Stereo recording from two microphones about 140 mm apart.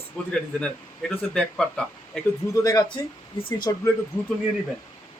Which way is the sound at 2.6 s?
25° left (ahead or behind).